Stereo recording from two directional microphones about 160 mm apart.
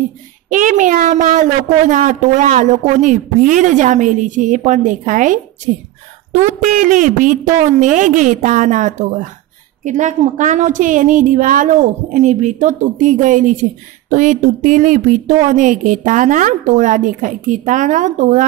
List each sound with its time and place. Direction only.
0.5 s speech: 55° right (ahead or behind)